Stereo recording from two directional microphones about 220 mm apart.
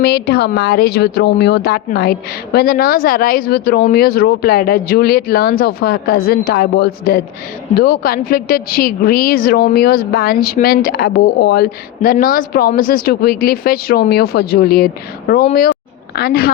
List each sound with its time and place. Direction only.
0.0 s a woman's voice: 50° left (ahead or behind)
16.1 s a woman's voice: 45° left (ahead or behind)